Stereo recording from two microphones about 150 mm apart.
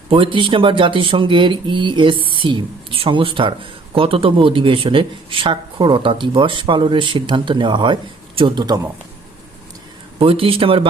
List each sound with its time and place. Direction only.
0.1 s a man's voice: 35° right (ahead or behind)
10.2 s speech: 40° right (ahead or behind)